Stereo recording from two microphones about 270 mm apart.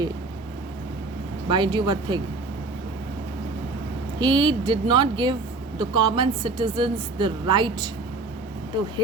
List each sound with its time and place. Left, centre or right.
1.5 s speech: centre
4.2 s speech: centre